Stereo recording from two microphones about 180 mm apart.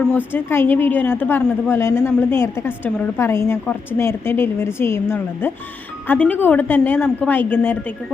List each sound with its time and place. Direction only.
0.3 s a woman's voice: 10° left (ahead or behind)